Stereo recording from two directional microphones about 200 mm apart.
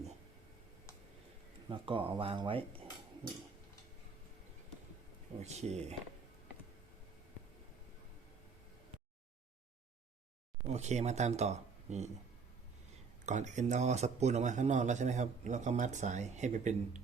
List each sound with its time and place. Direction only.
1.7 s speech: 25° right (ahead or behind)
5.4 s speech: 35° right (ahead or behind)
10.7 s speech: 35° right (ahead or behind)
13.2 s speech: 35° right (ahead or behind)